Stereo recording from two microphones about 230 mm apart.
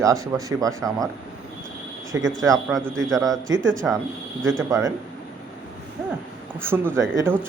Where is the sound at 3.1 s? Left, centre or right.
Centre.